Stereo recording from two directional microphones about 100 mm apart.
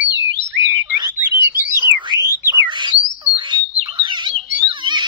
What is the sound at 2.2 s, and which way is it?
Bird, 30° right (ahead or behind).